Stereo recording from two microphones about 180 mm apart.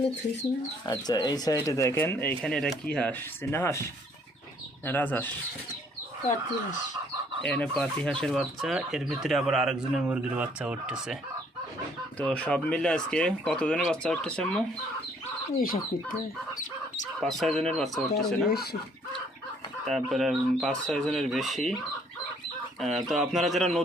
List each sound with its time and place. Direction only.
0.9 s speech: 25° left (ahead or behind)
4.9 s speech: 10° left (ahead or behind)
7.4 s speech: 5° left (ahead or behind)
12.2 s speech: 5° left (ahead or behind)
15.5 s speech: 50° left (ahead or behind)
17.2 s speech: centre (ahead or behind)
18.4 s speech: 60° left (ahead or behind)
19.8 s speech: centre (ahead or behind)
22.8 s speech: centre (ahead or behind)